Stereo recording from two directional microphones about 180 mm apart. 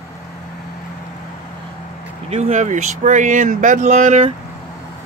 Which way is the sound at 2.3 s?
40° right (ahead or behind).